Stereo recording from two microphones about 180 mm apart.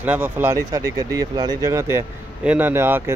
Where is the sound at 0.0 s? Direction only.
10° right (ahead or behind).